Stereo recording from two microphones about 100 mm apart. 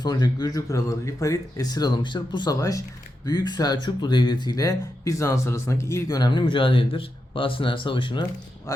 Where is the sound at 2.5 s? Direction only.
35° left (ahead or behind); by 8.2 s 55° left (ahead or behind).